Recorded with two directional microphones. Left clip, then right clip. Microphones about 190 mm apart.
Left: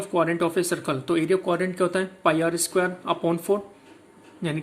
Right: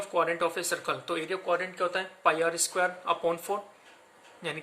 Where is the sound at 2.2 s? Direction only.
15° left (ahead or behind).